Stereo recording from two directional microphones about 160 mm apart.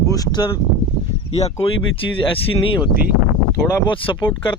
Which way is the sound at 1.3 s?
40° left (ahead or behind).